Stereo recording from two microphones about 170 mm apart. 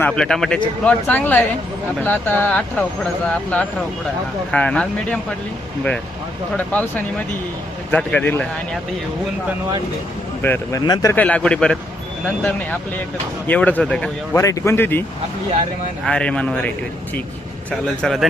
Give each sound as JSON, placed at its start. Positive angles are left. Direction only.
{"t": 0.0, "sound": "speech", "side_deg": 5}
{"t": 7.9, "sound": "speech", "side_deg": 10}
{"t": 10.4, "sound": "speech", "side_deg": 15}
{"t": 11.1, "sound": "speech", "side_deg": 10}
{"t": 13.5, "sound": "speech", "side_deg": 10}
{"t": 14.3, "sound": "speech", "side_deg": 20}
{"t": 16.0, "sound": "speech", "side_deg": 5}